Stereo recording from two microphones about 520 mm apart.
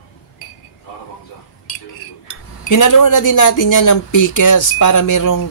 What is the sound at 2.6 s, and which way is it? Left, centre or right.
Speech, left.